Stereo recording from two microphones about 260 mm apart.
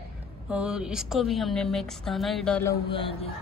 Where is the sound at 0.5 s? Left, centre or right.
Centre.